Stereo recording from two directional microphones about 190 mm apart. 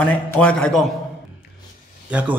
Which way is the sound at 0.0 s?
5° left (ahead or behind).